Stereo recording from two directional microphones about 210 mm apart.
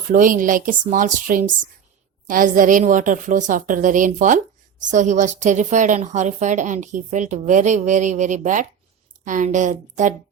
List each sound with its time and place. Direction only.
0.1 s speech: 40° right (ahead or behind)